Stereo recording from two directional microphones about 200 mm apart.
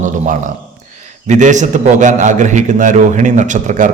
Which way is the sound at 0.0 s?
40° right (ahead or behind).